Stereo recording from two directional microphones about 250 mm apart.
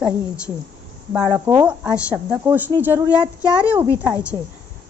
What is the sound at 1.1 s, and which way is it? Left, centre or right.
Speech, centre.